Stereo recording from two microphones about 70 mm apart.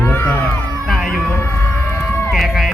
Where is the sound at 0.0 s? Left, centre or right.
Left.